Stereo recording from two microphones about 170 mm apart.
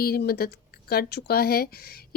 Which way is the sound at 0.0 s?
65° left (ahead or behind).